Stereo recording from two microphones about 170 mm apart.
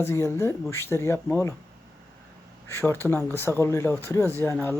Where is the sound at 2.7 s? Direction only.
15° left (ahead or behind).